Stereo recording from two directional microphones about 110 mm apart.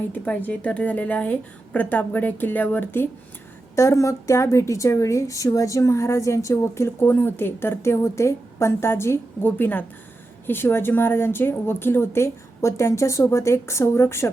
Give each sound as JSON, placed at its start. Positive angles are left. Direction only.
{"t": 0.1, "sound": "a woman's voice", "side_deg": 15}